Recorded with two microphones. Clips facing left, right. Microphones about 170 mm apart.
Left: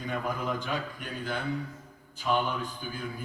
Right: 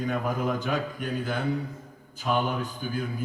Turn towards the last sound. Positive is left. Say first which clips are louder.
# right 5 dB
turn(degrees=-45)  # may be behind; listen again after turning